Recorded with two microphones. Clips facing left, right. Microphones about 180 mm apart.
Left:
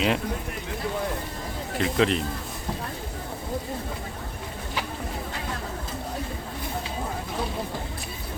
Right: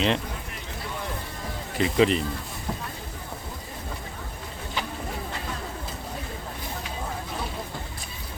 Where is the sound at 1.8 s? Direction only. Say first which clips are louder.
Right 2 dB; centre (ahead or behind).